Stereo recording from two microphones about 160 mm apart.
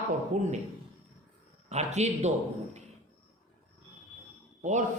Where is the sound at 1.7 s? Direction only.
45° right (ahead or behind).